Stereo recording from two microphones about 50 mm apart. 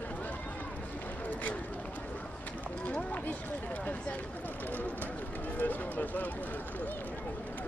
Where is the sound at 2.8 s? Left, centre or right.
Left.